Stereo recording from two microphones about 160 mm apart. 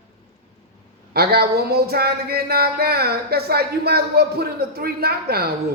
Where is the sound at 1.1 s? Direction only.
80° right.